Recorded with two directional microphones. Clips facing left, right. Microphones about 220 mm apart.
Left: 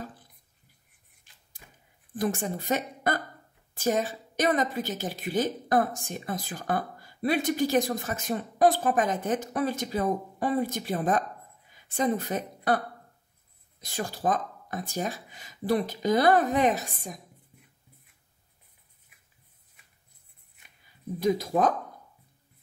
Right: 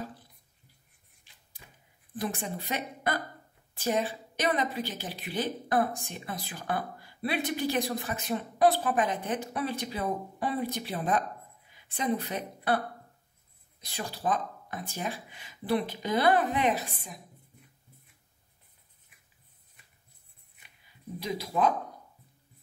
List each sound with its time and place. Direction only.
2.1 s a woman's voice: 45° left (ahead or behind)
21.2 s a woman's voice: 50° left (ahead or behind)